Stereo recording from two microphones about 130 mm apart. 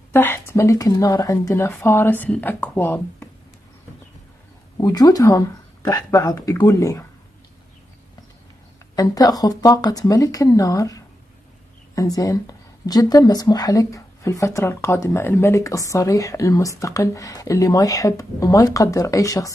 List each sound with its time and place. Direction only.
0.1 s speech: 15° left (ahead or behind)
4.7 s speech: 30° left (ahead or behind)
8.9 s speech: 30° left (ahead or behind)